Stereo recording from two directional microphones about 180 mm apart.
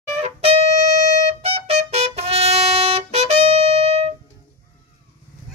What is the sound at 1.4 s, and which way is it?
Music, 35° right (ahead or behind).